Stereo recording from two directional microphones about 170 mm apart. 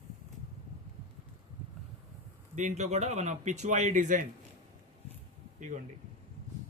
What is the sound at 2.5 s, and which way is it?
Speech, 45° right (ahead or behind).